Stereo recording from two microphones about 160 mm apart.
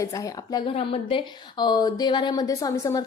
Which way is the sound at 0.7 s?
35° left (ahead or behind).